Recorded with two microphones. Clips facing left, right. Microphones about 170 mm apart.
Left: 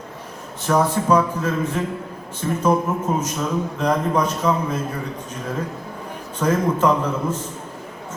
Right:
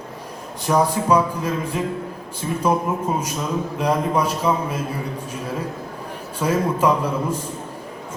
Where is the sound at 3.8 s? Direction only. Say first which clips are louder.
Even; 10° right (ahead or behind).